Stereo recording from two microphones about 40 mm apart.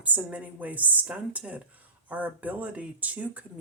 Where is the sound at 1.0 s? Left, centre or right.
Right.